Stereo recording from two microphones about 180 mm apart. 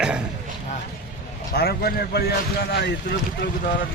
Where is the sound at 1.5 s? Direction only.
60° left (ahead or behind).